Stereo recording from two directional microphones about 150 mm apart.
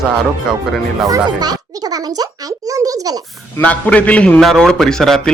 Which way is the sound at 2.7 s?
25° right (ahead or behind).